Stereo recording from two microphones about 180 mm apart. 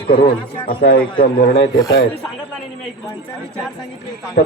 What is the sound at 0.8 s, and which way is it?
Speech, 65° left (ahead or behind).